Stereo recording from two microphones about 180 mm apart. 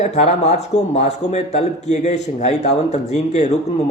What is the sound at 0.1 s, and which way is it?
Speech, 40° left (ahead or behind).